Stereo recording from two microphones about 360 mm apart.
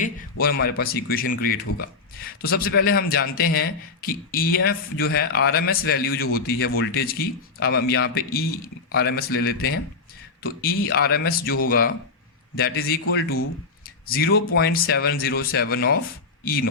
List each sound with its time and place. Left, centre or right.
0.0 s a man's voice: left